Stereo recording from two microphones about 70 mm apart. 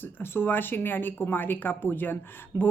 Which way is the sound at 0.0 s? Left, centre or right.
Left.